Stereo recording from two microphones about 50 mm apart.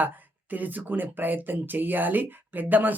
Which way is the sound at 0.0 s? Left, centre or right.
Right.